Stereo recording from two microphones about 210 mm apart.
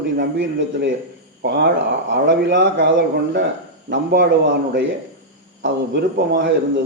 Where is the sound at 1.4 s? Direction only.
55° right (ahead or behind).